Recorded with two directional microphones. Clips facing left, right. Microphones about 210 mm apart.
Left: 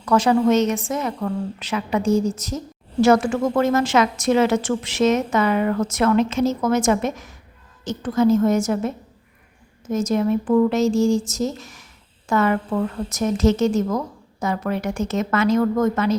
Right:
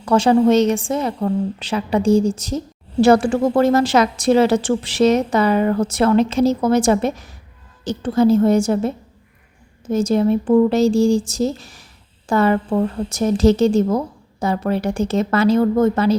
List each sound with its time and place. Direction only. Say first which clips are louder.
0.0 s a woman's voice: right 3 dB; 30° right (ahead or behind)
9.9 s a woman's voice: right 4 dB; 30° right (ahead or behind)